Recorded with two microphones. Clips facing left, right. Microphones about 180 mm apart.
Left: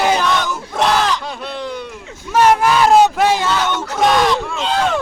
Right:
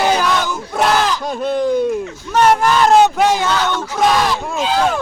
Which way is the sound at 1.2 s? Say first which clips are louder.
Right 8 dB; 45° right (ahead or behind).